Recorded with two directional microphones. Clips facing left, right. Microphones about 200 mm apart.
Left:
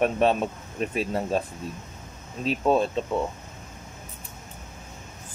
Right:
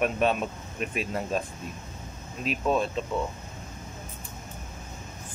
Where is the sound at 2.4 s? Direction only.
35° left (ahead or behind).